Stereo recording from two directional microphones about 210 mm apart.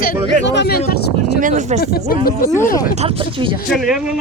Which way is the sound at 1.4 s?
35° right (ahead or behind).